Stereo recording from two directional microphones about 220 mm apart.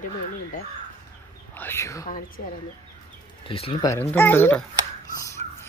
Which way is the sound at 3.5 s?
25° left (ahead or behind).